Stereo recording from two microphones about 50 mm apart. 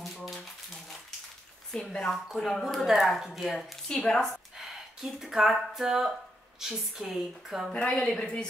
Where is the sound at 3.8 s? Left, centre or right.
Centre.